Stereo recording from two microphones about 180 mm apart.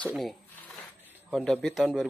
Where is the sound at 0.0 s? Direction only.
Centre (ahead or behind).